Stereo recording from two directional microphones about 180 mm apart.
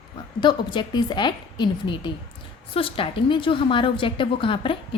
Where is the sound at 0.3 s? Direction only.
25° left (ahead or behind).